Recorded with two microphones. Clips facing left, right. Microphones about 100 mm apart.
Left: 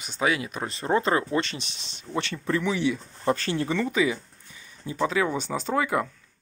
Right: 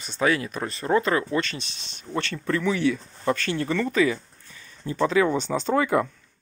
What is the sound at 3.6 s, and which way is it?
Speech, 15° left (ahead or behind).